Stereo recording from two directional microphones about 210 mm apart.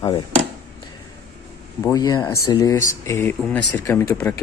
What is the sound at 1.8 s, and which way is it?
Speech, 15° left (ahead or behind).